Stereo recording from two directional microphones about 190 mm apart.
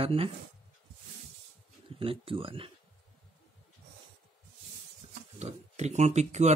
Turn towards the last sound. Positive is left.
turn(degrees=-35)  # may be behind; listen again after turning